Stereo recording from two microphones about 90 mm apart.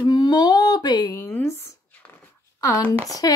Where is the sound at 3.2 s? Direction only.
45° left (ahead or behind).